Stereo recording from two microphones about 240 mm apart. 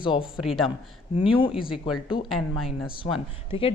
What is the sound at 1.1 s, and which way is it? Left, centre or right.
Speech, left.